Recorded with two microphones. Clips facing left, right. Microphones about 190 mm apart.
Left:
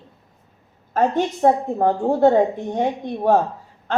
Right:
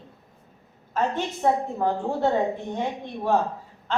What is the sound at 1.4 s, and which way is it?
A woman's voice, 50° left (ahead or behind).